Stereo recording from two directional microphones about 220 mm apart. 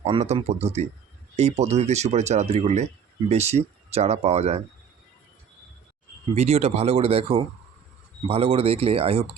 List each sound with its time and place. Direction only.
0.0 s speech: 30° right (ahead or behind)
6.3 s speech: 30° right (ahead or behind)